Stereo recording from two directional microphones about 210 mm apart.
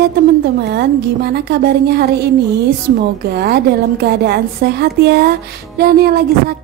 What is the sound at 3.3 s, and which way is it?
A woman's voice, 50° right (ahead or behind).